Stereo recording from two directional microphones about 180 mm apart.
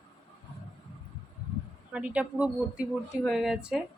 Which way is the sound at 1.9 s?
5° right (ahead or behind).